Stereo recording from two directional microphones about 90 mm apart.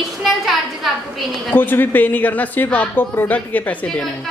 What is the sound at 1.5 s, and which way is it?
A woman's voice, 20° left (ahead or behind).